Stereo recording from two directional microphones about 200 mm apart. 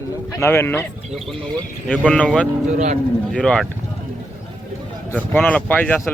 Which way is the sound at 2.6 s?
35° right (ahead or behind).